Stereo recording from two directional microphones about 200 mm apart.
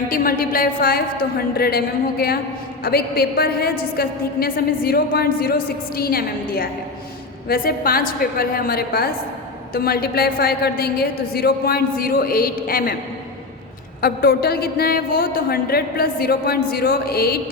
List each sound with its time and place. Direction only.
0.1 s a woman's voice: 45° left (ahead or behind)
14.0 s a woman's voice: 50° left (ahead or behind)